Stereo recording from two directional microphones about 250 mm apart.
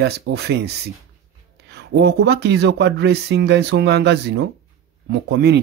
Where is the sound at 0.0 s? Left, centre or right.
Right.